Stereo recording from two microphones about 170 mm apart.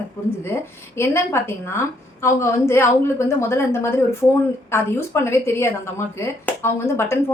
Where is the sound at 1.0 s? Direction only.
15° left (ahead or behind).